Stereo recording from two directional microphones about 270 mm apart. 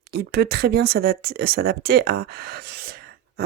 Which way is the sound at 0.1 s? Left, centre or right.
Right.